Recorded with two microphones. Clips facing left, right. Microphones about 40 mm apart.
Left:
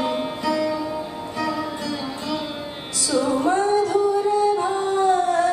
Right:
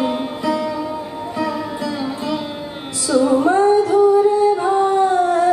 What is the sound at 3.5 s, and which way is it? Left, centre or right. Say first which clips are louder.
Music: right 6 dB; right.